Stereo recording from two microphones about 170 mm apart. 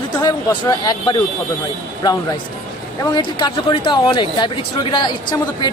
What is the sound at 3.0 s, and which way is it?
Speech, 25° left (ahead or behind).